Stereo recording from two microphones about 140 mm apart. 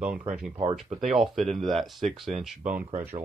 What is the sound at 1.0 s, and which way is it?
Speech, 5° right (ahead or behind).